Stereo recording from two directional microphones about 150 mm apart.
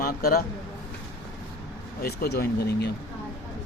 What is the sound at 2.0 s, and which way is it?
Speech, 90° left.